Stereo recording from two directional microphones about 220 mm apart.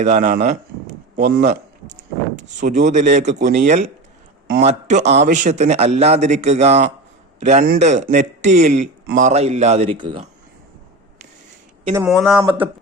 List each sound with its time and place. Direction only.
0.0 s a sound: 35° right (ahead or behind)
2.6 s a man's voice: 35° right (ahead or behind)
11.9 s speech: centre (ahead or behind)